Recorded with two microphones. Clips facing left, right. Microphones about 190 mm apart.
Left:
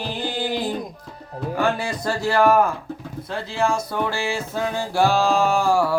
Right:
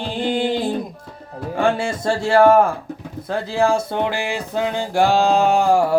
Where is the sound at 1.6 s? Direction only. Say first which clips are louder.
Right 4 dB; 25° right (ahead or behind).